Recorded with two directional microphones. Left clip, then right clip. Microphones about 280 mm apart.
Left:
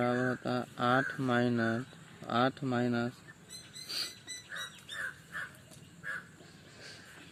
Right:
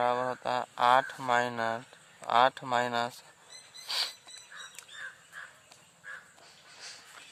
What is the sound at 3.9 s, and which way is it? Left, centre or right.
Rodents, centre.